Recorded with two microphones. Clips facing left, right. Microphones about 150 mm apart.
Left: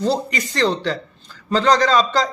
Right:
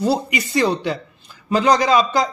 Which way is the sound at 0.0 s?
10° right (ahead or behind).